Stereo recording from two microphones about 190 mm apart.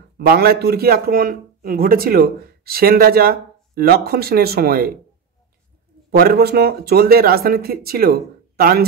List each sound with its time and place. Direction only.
0.3 s a man's voice: 55° right (ahead or behind)
6.0 s a man's voice: 55° right (ahead or behind)